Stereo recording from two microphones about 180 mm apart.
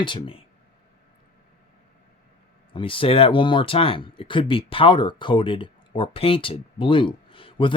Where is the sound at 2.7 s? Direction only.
30° left (ahead or behind).